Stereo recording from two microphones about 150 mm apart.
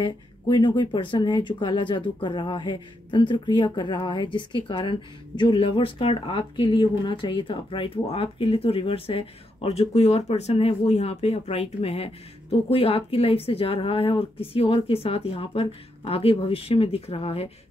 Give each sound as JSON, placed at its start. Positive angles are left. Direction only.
{"t": 0.0, "sound": "speech", "side_deg": 30}